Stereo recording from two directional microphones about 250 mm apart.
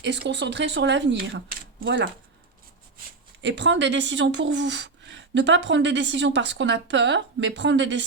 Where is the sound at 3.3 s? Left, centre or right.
Right.